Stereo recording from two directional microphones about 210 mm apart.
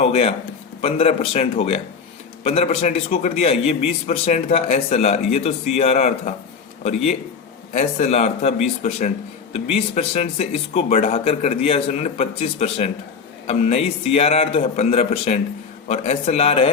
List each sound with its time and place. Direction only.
0.0 s a man's voice: 30° left (ahead or behind)
7.7 s a man's voice: 30° left (ahead or behind)